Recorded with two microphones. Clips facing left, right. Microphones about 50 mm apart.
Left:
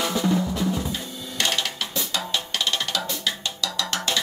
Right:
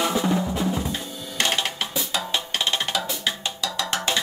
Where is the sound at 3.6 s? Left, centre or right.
Centre.